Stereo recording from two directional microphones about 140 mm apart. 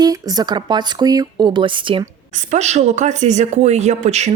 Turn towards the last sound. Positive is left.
turn(degrees=-50)  # may be behind; listen again after turning